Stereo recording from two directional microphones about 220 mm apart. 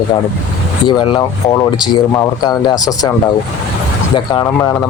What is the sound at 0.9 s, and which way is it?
Speech, 20° left (ahead or behind).